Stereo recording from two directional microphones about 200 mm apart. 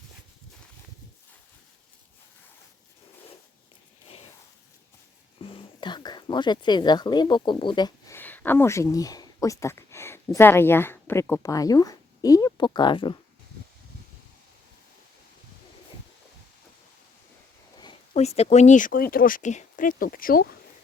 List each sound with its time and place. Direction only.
5.4 s speech: 25° left (ahead or behind)
18.1 s speech: 35° left (ahead or behind)